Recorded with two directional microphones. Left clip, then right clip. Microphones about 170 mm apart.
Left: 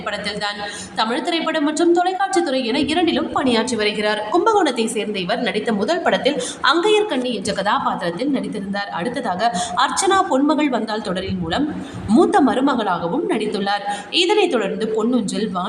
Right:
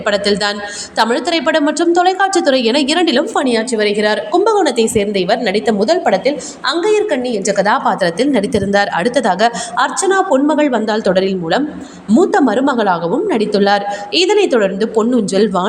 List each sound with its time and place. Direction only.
0.1 s a woman's voice: 35° right (ahead or behind)
12.0 s speech: 10° right (ahead or behind)
12.3 s a woman's voice: 25° right (ahead or behind)